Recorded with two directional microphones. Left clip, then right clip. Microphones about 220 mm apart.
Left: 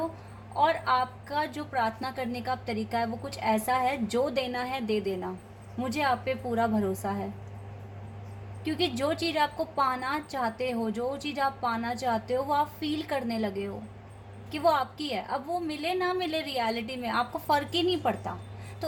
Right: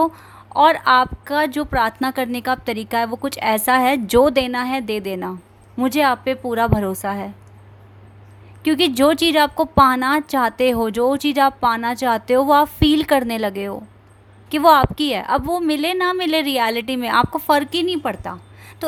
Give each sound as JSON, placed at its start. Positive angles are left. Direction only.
{"t": 0.5, "sound": "a woman's voice", "side_deg": -45}
{"t": 8.6, "sound": "a woman's voice", "side_deg": -45}